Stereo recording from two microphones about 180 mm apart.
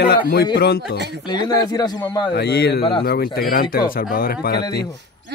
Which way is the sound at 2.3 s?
65° left (ahead or behind).